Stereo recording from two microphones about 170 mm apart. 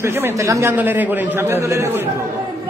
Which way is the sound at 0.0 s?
15° right (ahead or behind).